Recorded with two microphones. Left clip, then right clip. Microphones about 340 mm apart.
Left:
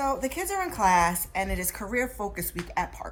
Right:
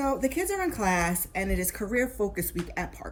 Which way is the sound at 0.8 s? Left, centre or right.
Left.